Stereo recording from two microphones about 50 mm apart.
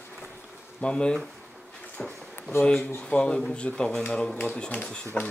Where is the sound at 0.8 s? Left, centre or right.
Centre.